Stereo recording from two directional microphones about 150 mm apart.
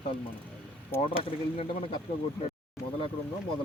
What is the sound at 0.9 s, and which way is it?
Speech, 15° left (ahead or behind).